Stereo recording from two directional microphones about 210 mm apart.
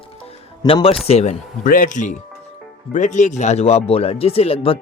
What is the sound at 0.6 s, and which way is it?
Speech, 25° left (ahead or behind).